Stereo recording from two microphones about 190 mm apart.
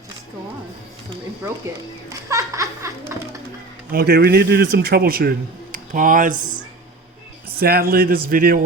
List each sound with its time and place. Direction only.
2.0 s speech: 15° right (ahead or behind)
3.9 s a man's voice: 55° right (ahead or behind)
7.6 s a man's voice: 50° right (ahead or behind)